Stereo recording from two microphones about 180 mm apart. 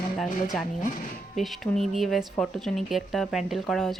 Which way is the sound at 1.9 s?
Centre (ahead or behind).